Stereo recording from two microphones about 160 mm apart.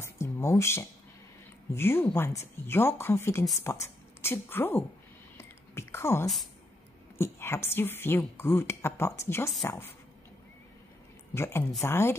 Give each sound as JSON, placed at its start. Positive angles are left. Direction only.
{"t": 0.0, "sound": "a sound", "side_deg": 20}
{"t": 1.7, "sound": "a woman's voice", "side_deg": 15}
{"t": 5.4, "sound": "whispering", "side_deg": 15}
{"t": 7.2, "sound": "a woman's voice", "side_deg": 15}
{"t": 11.3, "sound": "a woman's voice", "side_deg": 15}